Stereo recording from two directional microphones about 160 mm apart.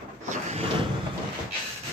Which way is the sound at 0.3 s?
45° right (ahead or behind).